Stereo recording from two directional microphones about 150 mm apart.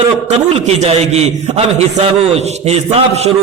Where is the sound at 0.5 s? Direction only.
45° right (ahead or behind).